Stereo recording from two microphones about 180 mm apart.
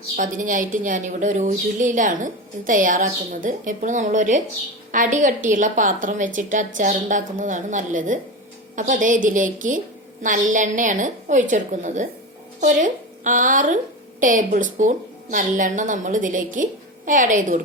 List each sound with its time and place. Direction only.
0.2 s a woman's voice: 50° right (ahead or behind)